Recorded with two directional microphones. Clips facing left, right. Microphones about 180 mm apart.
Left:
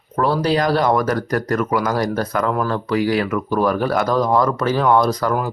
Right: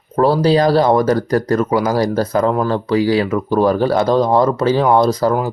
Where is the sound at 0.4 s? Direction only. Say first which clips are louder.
Right 4 dB; 30° right (ahead or behind).